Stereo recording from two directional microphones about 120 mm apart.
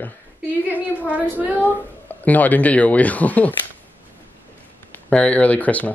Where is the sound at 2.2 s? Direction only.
15° left (ahead or behind).